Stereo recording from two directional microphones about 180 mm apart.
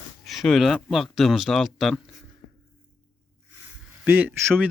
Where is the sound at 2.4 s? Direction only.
50° left (ahead or behind).